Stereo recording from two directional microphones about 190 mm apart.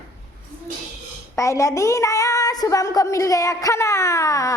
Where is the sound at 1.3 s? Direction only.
15° left (ahead or behind).